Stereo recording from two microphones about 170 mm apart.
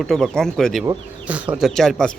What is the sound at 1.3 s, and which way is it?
Speech, 10° right (ahead or behind).